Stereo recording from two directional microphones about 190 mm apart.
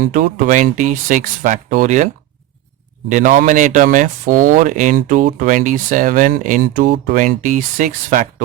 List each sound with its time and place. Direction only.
0.0 s speech: 45° right (ahead or behind)
3.1 s speech: 45° right (ahead or behind)